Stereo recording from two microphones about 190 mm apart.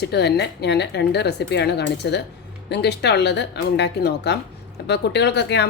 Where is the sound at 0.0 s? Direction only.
60° left (ahead or behind).